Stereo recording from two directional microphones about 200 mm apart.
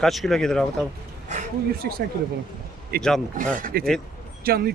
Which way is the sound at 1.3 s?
45° right (ahead or behind).